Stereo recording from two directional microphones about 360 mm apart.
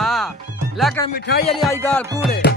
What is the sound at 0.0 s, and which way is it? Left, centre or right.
Music, centre.